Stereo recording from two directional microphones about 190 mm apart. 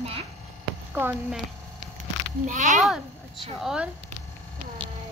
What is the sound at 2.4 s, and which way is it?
Speech, 40° right (ahead or behind).